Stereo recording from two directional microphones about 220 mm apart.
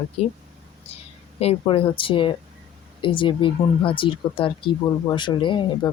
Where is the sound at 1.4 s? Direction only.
25° left (ahead or behind).